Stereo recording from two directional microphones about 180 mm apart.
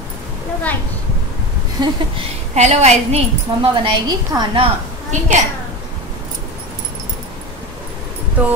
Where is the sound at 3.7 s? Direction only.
25° right (ahead or behind).